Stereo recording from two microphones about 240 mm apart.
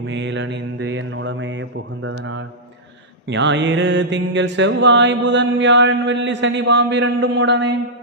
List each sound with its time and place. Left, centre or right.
0.1 s mantra: right